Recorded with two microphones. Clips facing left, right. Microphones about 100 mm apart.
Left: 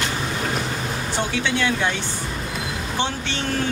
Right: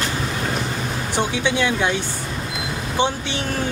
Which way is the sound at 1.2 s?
15° right (ahead or behind).